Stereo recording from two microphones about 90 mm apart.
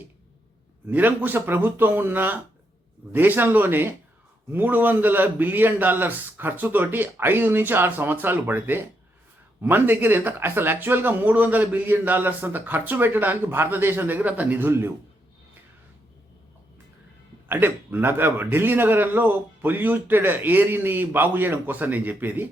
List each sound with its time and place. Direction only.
0.9 s speech: 20° right (ahead or behind)
17.5 s speech: 25° right (ahead or behind)